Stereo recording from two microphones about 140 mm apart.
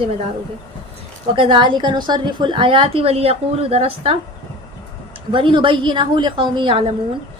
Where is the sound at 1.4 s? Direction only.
35° right (ahead or behind).